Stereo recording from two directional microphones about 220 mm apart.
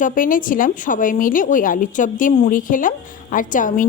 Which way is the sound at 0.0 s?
40° left (ahead or behind).